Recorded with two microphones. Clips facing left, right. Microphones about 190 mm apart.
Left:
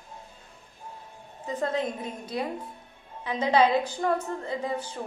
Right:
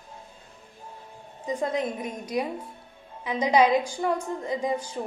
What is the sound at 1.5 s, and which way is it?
A woman's voice, 15° right (ahead or behind).